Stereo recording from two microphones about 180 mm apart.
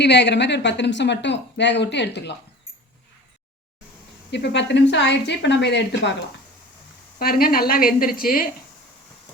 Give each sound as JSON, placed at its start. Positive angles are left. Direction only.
{"t": 0.0, "sound": "a woman's voice", "side_deg": 70}
{"t": 4.3, "sound": "a woman's voice", "side_deg": 70}
{"t": 7.2, "sound": "a woman's voice", "side_deg": 55}